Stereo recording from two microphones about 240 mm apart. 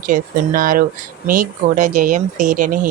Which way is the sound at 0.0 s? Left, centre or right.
Right.